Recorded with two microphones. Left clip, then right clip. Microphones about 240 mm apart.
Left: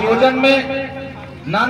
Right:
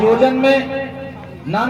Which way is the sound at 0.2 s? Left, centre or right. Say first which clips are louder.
Even; right.